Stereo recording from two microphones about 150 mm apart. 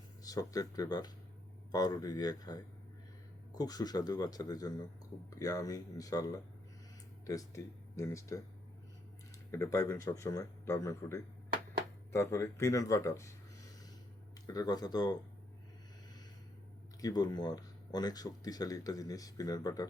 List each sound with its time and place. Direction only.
0.3 s speech: 25° left (ahead or behind)
9.5 s speech: 20° left (ahead or behind)
14.4 s speech: 25° left (ahead or behind)
17.0 s speech: 25° left (ahead or behind)